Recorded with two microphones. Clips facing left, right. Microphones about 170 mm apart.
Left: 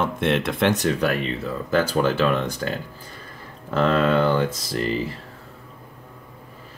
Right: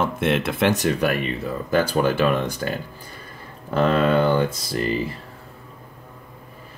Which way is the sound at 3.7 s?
15° right (ahead or behind).